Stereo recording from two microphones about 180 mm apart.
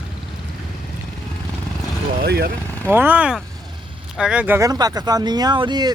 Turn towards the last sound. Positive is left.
turn(degrees=-25)  # may be behind; listen again after turning